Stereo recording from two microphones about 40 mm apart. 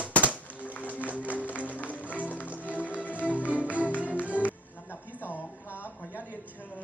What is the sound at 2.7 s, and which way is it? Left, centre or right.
Music, left.